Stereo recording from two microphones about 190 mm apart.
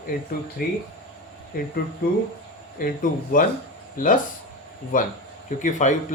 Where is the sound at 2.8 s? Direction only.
45° left (ahead or behind).